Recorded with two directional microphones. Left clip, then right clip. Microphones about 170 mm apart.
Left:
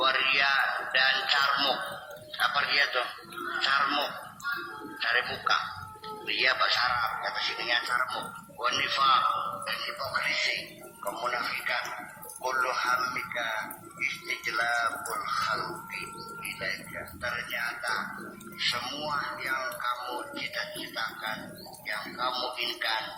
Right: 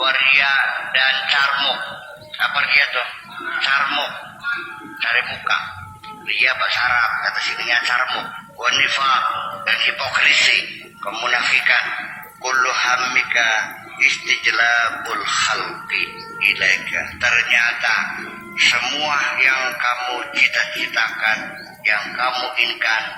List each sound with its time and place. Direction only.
0.0 s music: 35° left (ahead or behind)
2.4 s a man's voice: 35° left (ahead or behind)
7.9 s speech: centre (ahead or behind)
8.1 s a man's voice: 25° left (ahead or behind)
10.0 s a man's voice: centre (ahead or behind)
18.5 s a man's voice: 25° left (ahead or behind)
18.9 s speech: centre (ahead or behind)
20.4 s a man's voice: 30° left (ahead or behind)